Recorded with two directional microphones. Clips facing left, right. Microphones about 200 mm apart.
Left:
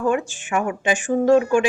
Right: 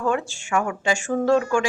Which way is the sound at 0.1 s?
20° left (ahead or behind).